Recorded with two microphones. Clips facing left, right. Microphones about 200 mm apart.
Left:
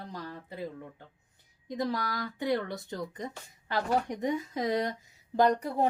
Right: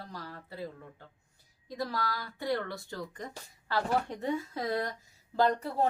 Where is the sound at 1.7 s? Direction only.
20° left (ahead or behind).